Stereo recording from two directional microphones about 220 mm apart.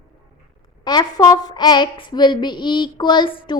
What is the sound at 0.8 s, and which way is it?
A woman's voice, 20° left (ahead or behind).